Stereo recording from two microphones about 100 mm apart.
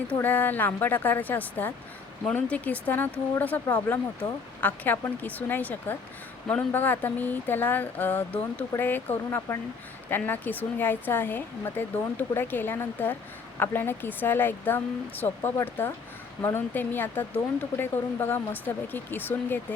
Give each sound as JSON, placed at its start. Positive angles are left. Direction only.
{"t": 0.1, "sound": "speech", "side_deg": 15}